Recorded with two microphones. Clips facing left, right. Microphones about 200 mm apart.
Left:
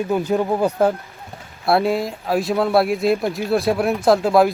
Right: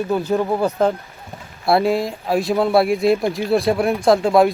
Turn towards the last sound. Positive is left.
turn(degrees=0)  # may be behind; listen again after turning